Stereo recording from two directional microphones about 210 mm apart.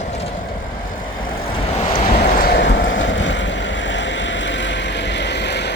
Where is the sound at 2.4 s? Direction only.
50° left (ahead or behind).